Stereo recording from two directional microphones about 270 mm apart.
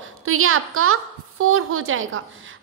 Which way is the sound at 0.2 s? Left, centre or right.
Right.